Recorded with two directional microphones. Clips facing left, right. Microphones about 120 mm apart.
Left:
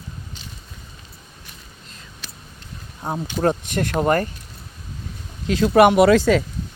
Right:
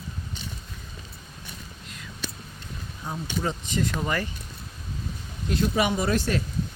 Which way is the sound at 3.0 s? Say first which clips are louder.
Left 9 dB; 60° left (ahead or behind).